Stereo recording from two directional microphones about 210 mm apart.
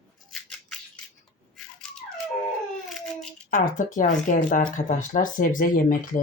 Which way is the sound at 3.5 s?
40° left (ahead or behind).